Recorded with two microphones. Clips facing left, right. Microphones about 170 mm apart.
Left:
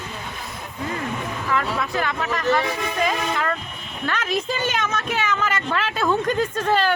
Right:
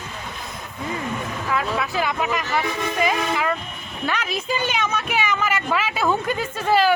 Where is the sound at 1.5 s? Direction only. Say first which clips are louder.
Even; 10° right (ahead or behind).